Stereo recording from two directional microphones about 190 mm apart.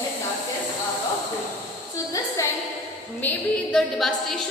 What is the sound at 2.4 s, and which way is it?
A woman's voice, 15° left (ahead or behind).